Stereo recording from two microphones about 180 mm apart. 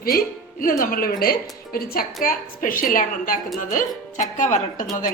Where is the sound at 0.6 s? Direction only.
50° left (ahead or behind).